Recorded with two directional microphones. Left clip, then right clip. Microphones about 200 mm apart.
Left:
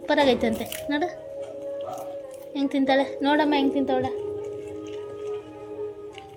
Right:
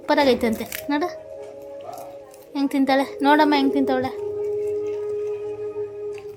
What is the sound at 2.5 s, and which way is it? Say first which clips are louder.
A woman's voice: right 2 dB; 25° right (ahead or behind).